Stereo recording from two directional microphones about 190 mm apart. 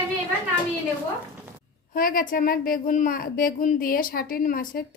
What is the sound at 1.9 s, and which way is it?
A woman's voice, 50° left (ahead or behind).